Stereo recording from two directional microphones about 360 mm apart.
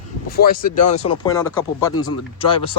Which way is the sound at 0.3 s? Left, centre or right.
Left.